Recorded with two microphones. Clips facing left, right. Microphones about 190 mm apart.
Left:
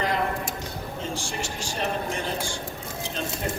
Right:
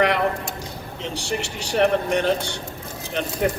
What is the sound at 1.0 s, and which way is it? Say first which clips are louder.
A man's voice: right 6 dB; 70° right (ahead or behind).